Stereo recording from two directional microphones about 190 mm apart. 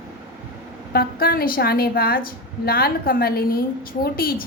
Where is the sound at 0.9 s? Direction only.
50° left (ahead or behind).